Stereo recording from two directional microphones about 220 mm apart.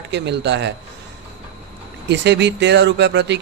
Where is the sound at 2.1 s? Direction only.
50° right (ahead or behind).